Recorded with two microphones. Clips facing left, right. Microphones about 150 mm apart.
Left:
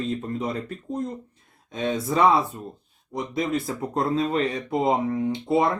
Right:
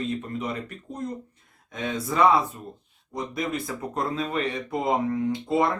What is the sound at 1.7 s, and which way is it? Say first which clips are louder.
Speech: left 4 dB; 25° left (ahead or behind).